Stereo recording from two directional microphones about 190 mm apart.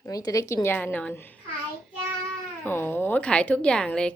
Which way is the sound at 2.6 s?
10° left (ahead or behind).